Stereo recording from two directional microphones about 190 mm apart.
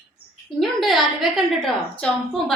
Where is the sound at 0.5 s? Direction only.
Centre (ahead or behind).